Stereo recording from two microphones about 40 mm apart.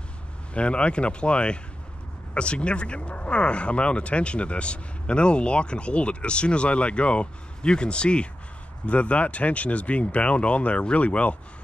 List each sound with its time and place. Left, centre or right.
0.6 s speech: left